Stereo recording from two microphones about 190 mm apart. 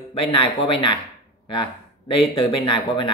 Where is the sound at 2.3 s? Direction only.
25° left (ahead or behind).